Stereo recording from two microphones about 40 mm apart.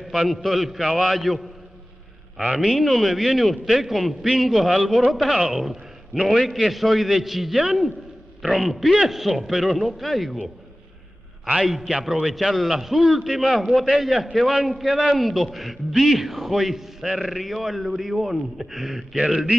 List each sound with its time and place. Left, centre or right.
0.0 s a man's voice: centre
2.6 s a man's voice: centre
11.6 s a man's voice: centre